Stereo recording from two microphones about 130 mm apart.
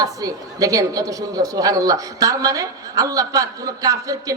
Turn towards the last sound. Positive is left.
turn(degrees=-25)  # may be behind; listen again after turning